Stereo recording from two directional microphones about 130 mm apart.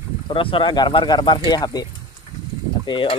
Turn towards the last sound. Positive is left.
turn(degrees=40)  # may be behind; listen again after turning